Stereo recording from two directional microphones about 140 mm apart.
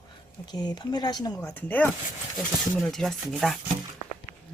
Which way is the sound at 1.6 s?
10° left (ahead or behind).